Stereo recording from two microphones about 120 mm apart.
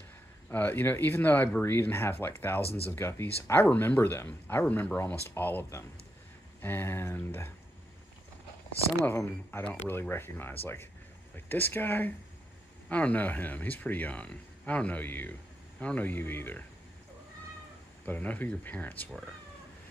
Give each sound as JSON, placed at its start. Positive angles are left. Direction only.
{"t": 0.5, "sound": "speech", "side_deg": 15}
{"t": 9.0, "sound": "speech", "side_deg": 20}
{"t": 18.0, "sound": "speech", "side_deg": 15}